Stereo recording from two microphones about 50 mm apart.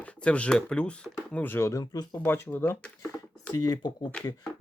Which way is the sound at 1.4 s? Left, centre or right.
Left.